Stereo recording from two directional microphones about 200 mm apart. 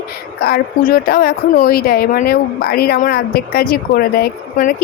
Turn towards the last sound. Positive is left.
turn(degrees=50)  # may be behind; listen again after turning